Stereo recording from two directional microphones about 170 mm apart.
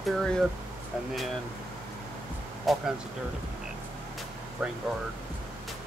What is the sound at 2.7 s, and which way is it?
Speech, centre (ahead or behind).